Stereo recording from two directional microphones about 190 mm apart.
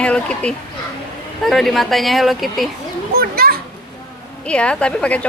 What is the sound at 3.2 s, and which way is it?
Children playing, 50° right (ahead or behind).